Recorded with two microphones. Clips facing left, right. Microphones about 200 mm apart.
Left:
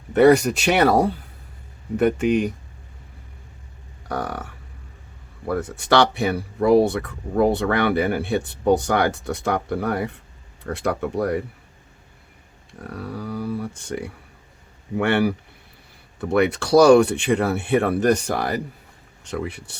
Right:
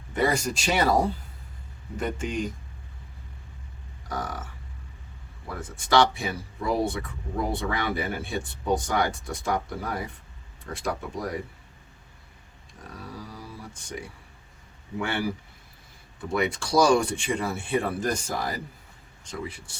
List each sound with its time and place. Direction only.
0.1 s speech: 65° left (ahead or behind)
4.1 s speech: 65° left (ahead or behind)
5.5 s speech: 65° left (ahead or behind)
12.9 s speech: 65° left (ahead or behind)
16.3 s speech: 65° left (ahead or behind)